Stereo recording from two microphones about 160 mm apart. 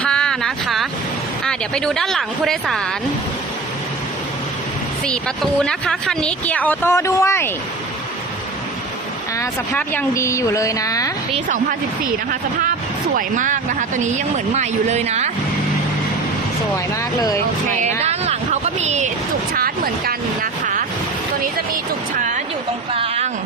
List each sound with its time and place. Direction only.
0.0 s a sound: 5° left (ahead or behind)
1.5 s speech: 5° left (ahead or behind)
5.0 s speech: 5° left (ahead or behind)
9.4 s speech: 10° left (ahead or behind)
12.0 s speech: 55° right (ahead or behind)
16.7 s speech: 20° left (ahead or behind)
18.0 s a sound: 40° right (ahead or behind)
19.5 s vehicle: 65° right (ahead or behind)
23.0 s a sound: 45° right (ahead or behind)